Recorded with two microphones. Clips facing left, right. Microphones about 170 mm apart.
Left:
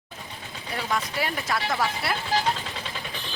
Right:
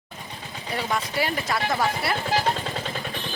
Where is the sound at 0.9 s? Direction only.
Centre (ahead or behind).